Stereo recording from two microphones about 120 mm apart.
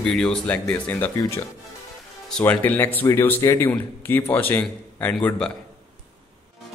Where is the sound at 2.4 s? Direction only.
15° left (ahead or behind).